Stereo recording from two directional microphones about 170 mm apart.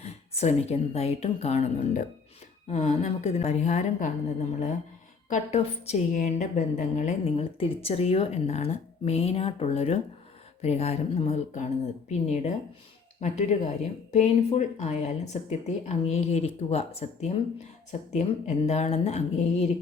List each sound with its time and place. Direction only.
0.0 s a woman's voice: 40° left (ahead or behind)
5.3 s a woman's voice: 40° left (ahead or behind)